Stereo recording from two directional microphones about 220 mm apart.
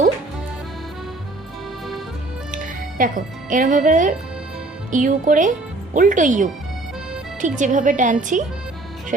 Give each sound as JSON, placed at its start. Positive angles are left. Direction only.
{"t": 2.5, "sound": "speech", "side_deg": -35}